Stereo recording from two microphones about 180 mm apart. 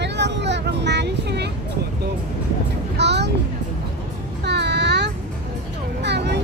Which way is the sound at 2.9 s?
70° right (ahead or behind).